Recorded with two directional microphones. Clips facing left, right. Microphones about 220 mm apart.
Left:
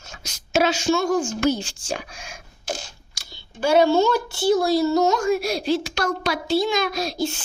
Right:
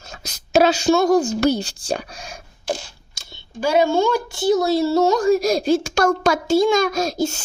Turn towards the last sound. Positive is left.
turn(degrees=-45)  # may be behind; listen again after turning